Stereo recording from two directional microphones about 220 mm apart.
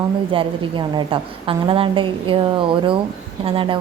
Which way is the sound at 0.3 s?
20° right (ahead or behind).